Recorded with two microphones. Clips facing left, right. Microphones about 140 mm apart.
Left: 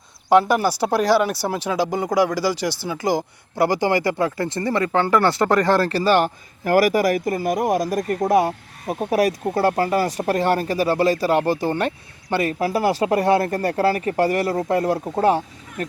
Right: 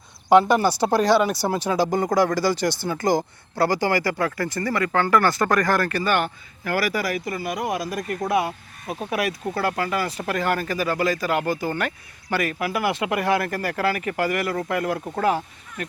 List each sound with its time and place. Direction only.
0.3 s speech: 5° left (ahead or behind)
3.6 s speech: 20° left (ahead or behind)